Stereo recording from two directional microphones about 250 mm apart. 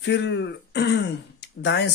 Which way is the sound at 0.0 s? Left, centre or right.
Left.